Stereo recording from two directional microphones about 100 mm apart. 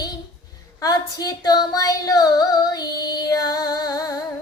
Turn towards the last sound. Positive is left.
turn(degrees=40)  # may be behind; listen again after turning